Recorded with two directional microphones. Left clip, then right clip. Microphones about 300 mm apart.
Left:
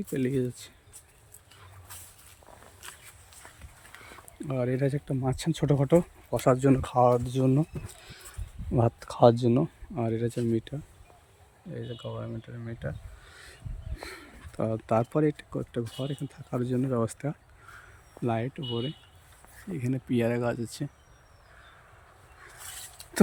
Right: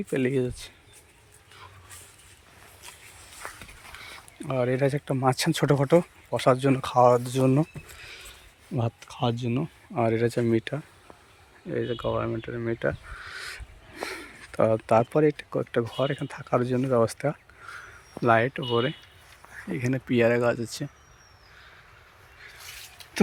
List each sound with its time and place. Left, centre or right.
0.1 s speech: centre
4.1 s speech: centre
11.7 s speech: right
13.3 s speech: centre
19.7 s speech: centre